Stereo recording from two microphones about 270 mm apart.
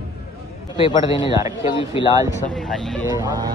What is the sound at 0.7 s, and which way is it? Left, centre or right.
Speech, centre.